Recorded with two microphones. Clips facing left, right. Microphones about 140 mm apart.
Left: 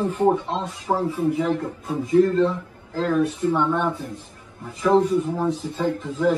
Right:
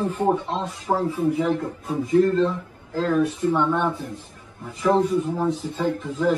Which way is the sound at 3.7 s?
10° right (ahead or behind).